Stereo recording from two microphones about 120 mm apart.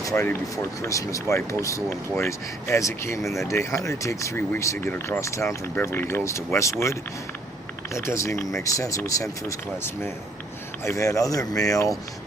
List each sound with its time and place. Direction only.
0.0 s a sound: 25° left (ahead or behind)
0.5 s speech: 25° left (ahead or behind)
7.9 s speech: 25° left (ahead or behind)